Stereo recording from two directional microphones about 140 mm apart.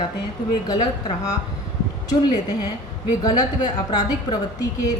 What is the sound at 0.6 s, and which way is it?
Speech, 30° left (ahead or behind).